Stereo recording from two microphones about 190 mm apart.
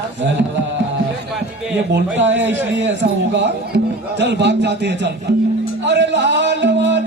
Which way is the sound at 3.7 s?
65° right (ahead or behind).